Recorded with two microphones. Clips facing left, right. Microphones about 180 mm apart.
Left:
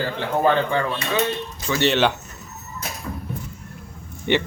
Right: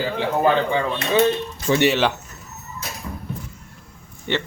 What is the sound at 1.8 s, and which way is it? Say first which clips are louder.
Speech: left 1 dB; 5° right (ahead or behind).